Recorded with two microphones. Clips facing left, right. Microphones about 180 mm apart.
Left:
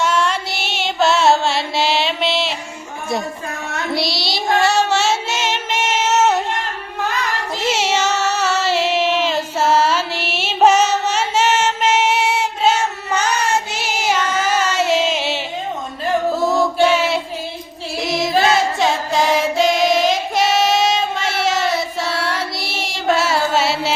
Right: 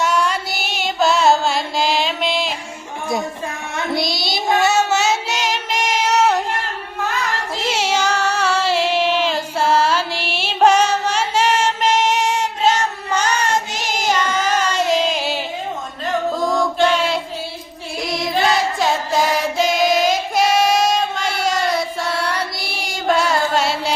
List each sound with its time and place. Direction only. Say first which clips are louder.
0.0 s carnatic music: left 1 dB; centre (ahead or behind)
4.0 s child singing: even; 50° right (ahead or behind)
4.6 s music: left 1 dB; centre (ahead or behind)
7.6 s a sound: left 1 dB; 5° left (ahead or behind)
16.4 s chant: left 1 dB; 5° left (ahead or behind)
18.0 s music: left 3 dB; centre (ahead or behind)